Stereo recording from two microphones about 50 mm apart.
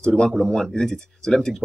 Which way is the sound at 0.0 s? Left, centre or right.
Centre.